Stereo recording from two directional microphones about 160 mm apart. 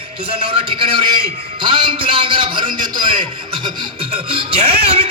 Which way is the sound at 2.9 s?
30° right (ahead or behind).